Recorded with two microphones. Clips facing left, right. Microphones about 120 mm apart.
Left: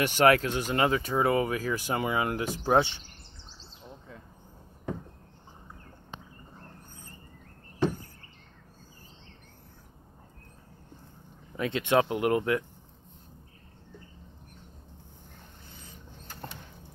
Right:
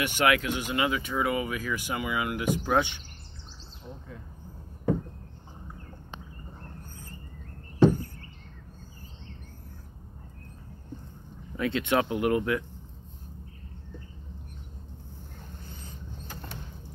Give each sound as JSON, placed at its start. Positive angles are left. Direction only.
{"t": 0.0, "sound": "speech", "side_deg": 40}
{"t": 11.5, "sound": "speech", "side_deg": 25}